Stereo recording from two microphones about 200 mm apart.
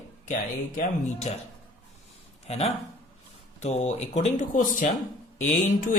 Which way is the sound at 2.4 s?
30° left (ahead or behind).